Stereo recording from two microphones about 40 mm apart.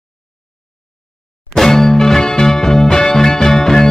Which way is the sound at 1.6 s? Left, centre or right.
Centre.